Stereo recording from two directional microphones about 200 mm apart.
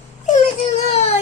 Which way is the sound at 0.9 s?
35° left (ahead or behind).